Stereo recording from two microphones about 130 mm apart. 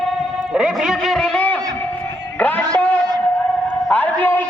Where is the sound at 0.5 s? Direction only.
5° right (ahead or behind); by 4.4 s 15° left (ahead or behind).